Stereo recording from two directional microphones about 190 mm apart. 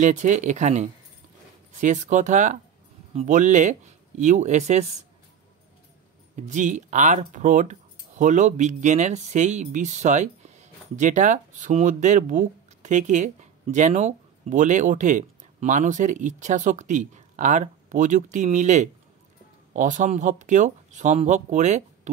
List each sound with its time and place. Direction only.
0.0 s speech: 40° right (ahead or behind)
6.3 s speech: 40° right (ahead or behind)